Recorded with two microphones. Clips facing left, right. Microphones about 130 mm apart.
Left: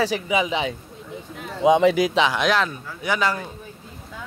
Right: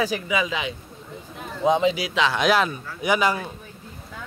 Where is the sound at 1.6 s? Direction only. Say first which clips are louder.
Left 4 dB; 70° left (ahead or behind).